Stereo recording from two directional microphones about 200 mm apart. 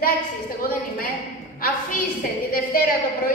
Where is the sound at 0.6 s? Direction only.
45° left (ahead or behind).